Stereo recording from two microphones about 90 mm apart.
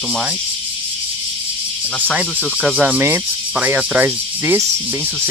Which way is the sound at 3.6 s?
20° right (ahead or behind).